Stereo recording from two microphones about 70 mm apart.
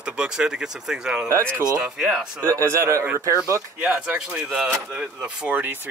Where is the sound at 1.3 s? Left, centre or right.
Right.